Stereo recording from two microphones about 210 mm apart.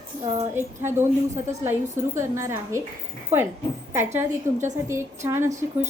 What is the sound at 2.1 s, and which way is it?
Speech, 15° right (ahead or behind).